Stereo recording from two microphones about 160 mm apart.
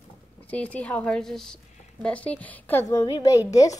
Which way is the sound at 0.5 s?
10° left (ahead or behind).